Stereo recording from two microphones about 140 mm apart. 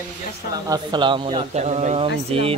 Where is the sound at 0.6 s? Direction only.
30° right (ahead or behind).